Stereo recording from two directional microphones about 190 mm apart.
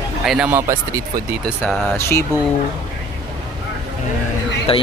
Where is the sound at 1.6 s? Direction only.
10° left (ahead or behind).